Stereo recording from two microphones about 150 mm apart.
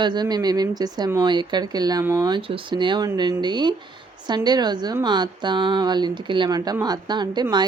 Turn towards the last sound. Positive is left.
turn(degrees=-30)  # may be behind; listen again after turning